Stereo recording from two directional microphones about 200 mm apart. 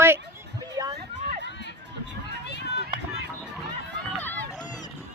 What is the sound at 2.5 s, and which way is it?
Run, 55° left (ahead or behind).